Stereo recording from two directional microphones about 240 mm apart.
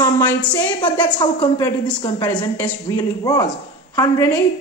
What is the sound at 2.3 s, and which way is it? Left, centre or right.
A woman's voice, centre.